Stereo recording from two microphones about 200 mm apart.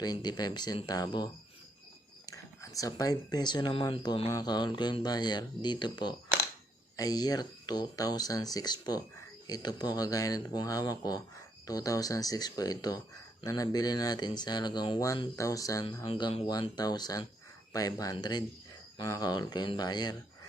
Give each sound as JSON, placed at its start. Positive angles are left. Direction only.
{"t": 0.0, "sound": "speech", "side_deg": 20}